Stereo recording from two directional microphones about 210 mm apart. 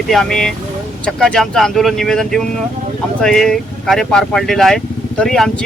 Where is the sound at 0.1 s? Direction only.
Centre (ahead or behind).